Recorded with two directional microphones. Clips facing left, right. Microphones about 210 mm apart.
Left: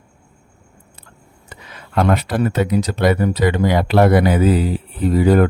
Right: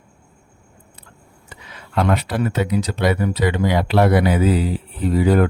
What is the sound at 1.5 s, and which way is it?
Speech, 45° left (ahead or behind).